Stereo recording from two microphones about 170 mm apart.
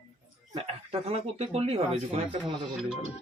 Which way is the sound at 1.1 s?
35° right (ahead or behind).